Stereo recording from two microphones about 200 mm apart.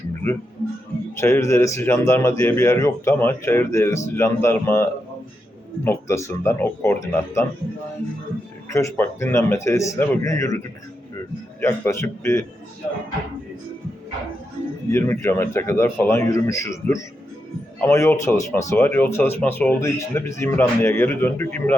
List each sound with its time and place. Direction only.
1.1 s speech: 15° left (ahead or behind)
8.7 s speech: 15° left (ahead or behind)
11.6 s speech: 15° left (ahead or behind)
14.8 s speech: 15° left (ahead or behind)